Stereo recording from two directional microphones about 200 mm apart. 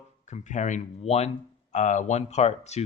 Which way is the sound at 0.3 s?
35° left (ahead or behind).